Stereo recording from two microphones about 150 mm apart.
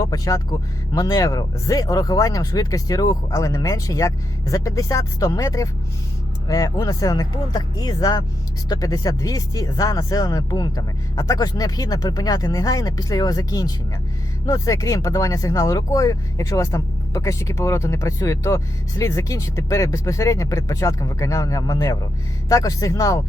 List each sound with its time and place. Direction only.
0.0 s speech: 25° left (ahead or behind)